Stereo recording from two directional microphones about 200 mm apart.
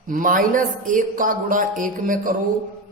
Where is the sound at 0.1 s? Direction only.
40° right (ahead or behind).